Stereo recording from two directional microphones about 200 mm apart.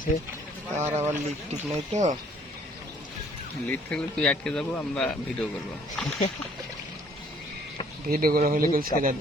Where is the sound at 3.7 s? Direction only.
5° left (ahead or behind).